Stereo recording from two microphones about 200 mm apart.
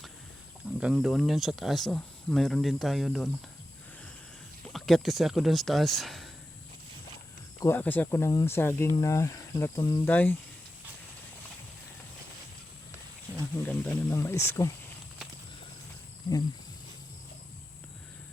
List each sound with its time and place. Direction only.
0.8 s speech: 5° right (ahead or behind)
4.7 s speech: centre (ahead or behind)
7.6 s speech: 10° left (ahead or behind)
13.6 s speech: 5° left (ahead or behind)
16.3 s speech: 20° left (ahead or behind)